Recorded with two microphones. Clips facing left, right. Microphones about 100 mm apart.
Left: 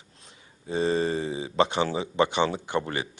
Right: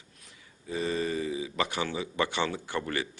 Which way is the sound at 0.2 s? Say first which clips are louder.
Left 3 dB; 30° left (ahead or behind).